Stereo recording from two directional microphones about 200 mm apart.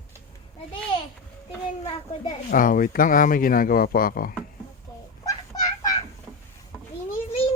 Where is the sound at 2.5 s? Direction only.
45° left (ahead or behind).